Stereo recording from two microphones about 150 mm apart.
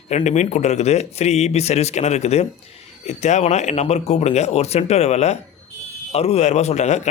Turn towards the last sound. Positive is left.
turn(degrees=50)  # may be behind; listen again after turning